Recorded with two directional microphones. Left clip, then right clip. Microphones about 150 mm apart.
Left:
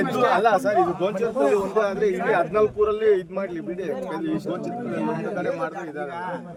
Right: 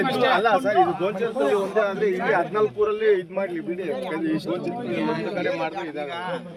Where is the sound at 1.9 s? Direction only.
35° left (ahead or behind).